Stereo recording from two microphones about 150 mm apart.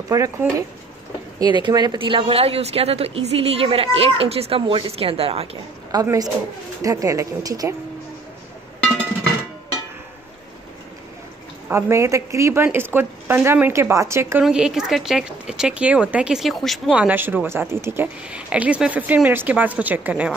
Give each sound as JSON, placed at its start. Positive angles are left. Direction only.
{"t": 0.1, "sound": "speech", "side_deg": -20}
{"t": 5.9, "sound": "speech", "side_deg": -25}
{"t": 11.7, "sound": "speech", "side_deg": -20}
{"t": 14.4, "sound": "speech", "side_deg": -5}
{"t": 17.0, "sound": "speech", "side_deg": -10}